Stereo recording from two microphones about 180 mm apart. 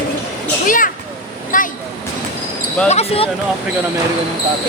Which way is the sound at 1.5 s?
50° left (ahead or behind).